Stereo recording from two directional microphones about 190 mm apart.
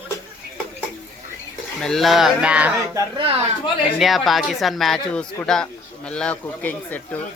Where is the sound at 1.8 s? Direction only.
Centre (ahead or behind).